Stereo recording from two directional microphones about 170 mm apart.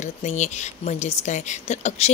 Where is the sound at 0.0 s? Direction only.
45° left (ahead or behind).